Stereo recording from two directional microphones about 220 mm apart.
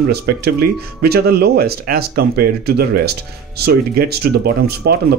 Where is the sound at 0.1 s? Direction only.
45° right (ahead or behind).